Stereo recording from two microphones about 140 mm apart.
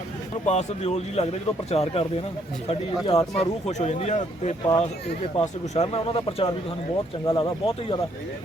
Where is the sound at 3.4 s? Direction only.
50° left (ahead or behind).